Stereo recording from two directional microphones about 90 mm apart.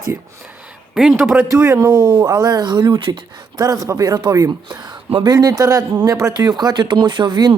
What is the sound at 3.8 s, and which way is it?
A man's voice, 40° right (ahead or behind).